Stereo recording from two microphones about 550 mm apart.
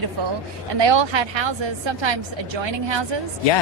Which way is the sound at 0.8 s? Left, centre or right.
Right.